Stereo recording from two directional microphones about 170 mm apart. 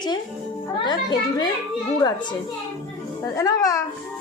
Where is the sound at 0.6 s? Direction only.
25° left (ahead or behind).